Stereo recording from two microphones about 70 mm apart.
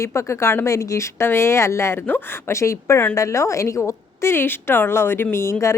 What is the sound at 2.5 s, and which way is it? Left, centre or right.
Speech, left.